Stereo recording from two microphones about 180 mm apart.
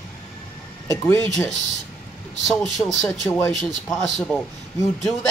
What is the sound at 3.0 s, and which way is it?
Speech, 15° left (ahead or behind).